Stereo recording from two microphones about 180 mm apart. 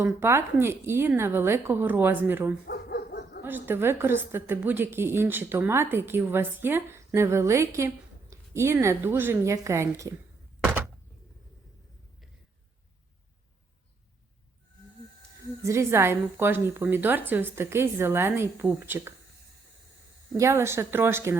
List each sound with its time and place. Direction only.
0.0 s a woman's voice: 15° right (ahead or behind)
2.6 s bow-wow: 65° left (ahead or behind)
3.4 s a woman's voice: 10° right (ahead or behind)
10.6 s thunk: 10° right (ahead or behind)
15.6 s a woman's voice: 15° right (ahead or behind)
20.3 s a woman's voice: 15° right (ahead or behind)